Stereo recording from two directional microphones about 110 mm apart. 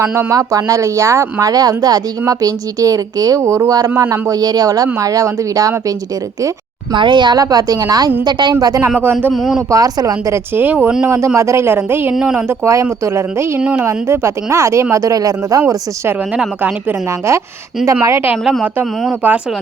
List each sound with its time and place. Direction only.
0.0 s speech: 25° right (ahead or behind)
6.9 s speech: 45° right (ahead or behind)
9.3 s speech: 5° right (ahead or behind)
9.6 s speech: 30° right (ahead or behind)
11.0 s speech: 25° right (ahead or behind)
12.1 s speech: 10° right (ahead or behind)
12.5 s speech: 25° right (ahead or behind)
13.6 s speech: 10° right (ahead or behind)
13.8 s speech: 25° right (ahead or behind)
18.6 s speech: 15° right (ahead or behind)